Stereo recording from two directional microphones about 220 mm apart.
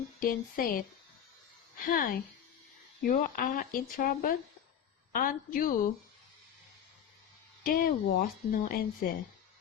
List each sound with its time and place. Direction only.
0.2 s speech: 40° left (ahead or behind)
7.6 s speech: 40° left (ahead or behind)